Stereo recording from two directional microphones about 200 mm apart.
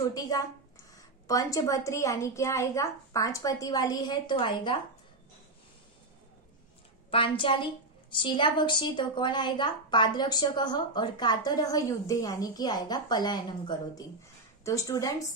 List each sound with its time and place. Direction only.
0.0 s a woman's voice: 20° left (ahead or behind)
7.1 s a woman's voice: 25° left (ahead or behind)